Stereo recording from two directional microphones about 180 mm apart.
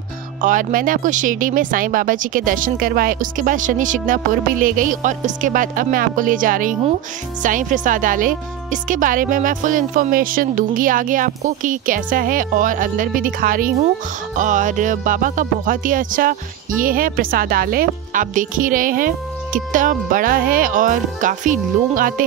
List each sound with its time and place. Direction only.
0.4 s music: 50° right (ahead or behind)